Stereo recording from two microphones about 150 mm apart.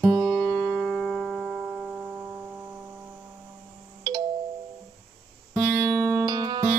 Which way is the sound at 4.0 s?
30° right (ahead or behind).